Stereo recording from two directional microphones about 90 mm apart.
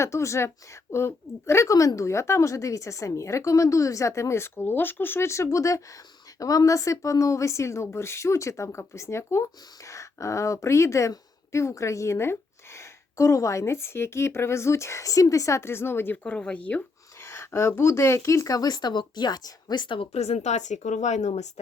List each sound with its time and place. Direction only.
0.0 s a woman's voice: 30° left (ahead or behind); by 16.8 s 15° left (ahead or behind)
17.2 s a woman's voice: 30° left (ahead or behind); by 20.1 s 65° left (ahead or behind)